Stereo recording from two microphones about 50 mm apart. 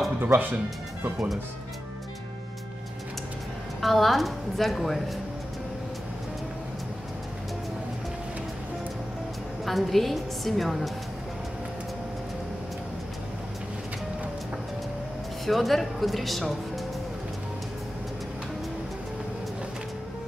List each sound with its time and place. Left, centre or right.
0.2 s speech: right
3.8 s a woman's voice: centre
9.7 s a woman's voice: centre
15.4 s a woman's voice: centre